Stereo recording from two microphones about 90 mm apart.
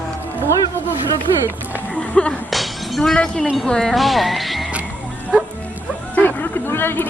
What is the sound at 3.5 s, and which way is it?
Speech, 5° left (ahead or behind).